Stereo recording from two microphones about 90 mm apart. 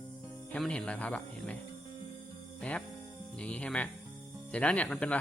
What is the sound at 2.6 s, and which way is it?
Speech, 15° left (ahead or behind).